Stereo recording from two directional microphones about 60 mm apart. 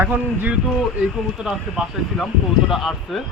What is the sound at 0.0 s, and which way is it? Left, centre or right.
Speech, right.